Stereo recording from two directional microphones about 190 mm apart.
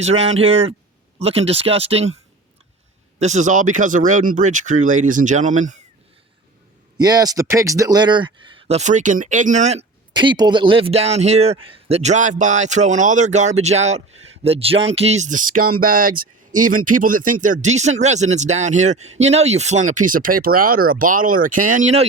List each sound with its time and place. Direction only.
0.0 s a man's voice: 35° right (ahead or behind)
3.2 s a man's voice: 40° right (ahead or behind)
7.0 s speech: 20° right (ahead or behind); by 9.8 s 35° right (ahead or behind)
10.1 s a man's voice: 25° right (ahead or behind); by 22.0 s 40° right (ahead or behind)